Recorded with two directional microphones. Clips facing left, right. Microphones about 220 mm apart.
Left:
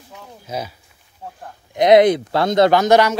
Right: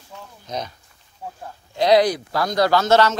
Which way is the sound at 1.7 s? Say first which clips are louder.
Left 5 dB; 20° left (ahead or behind).